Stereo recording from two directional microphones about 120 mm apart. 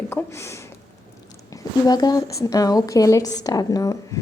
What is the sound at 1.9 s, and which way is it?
Speech, 35° left (ahead or behind).